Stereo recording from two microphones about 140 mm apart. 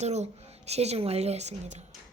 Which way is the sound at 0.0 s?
50° right (ahead or behind).